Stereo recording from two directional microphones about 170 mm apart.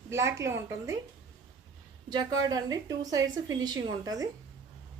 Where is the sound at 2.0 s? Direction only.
25° right (ahead or behind).